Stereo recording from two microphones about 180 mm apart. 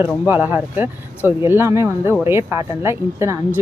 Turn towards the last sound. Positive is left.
turn(degrees=-15)  # may be behind; listen again after turning